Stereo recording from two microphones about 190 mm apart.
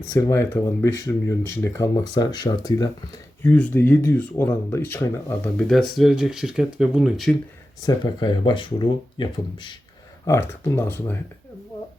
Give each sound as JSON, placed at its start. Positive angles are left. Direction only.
{"t": 0.1, "sound": "speech", "side_deg": 15}
{"t": 5.6, "sound": "speech", "side_deg": 0}
{"t": 7.8, "sound": "speech", "side_deg": 20}
{"t": 10.2, "sound": "speech", "side_deg": 15}